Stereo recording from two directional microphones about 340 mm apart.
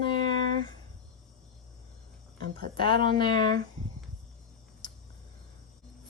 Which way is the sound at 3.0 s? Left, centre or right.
Centre.